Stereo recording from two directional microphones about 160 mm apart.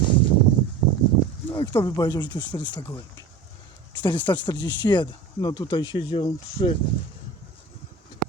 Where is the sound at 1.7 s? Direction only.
20° left (ahead or behind).